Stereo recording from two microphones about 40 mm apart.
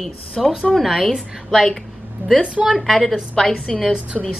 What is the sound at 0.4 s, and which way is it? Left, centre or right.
Speech, centre.